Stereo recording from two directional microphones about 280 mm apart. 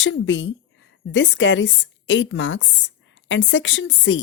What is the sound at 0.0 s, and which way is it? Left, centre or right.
A woman's voice, left.